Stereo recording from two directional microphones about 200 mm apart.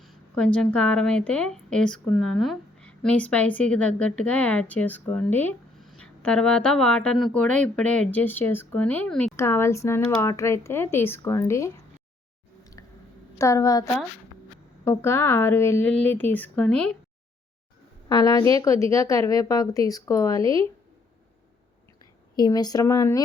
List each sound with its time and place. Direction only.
0.0 s a woman's voice: centre (ahead or behind)
13.4 s a woman's voice: 15° left (ahead or behind)
18.1 s a woman's voice: 20° left (ahead or behind)
22.4 s speech: 20° left (ahead or behind)